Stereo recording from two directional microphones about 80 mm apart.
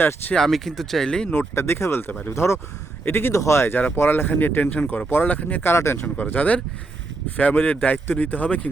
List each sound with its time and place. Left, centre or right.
0.3 s speech: centre
1.3 s speech: left